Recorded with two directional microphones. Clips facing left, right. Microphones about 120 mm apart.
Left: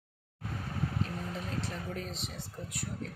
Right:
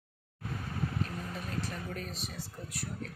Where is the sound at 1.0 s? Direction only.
25° left (ahead or behind).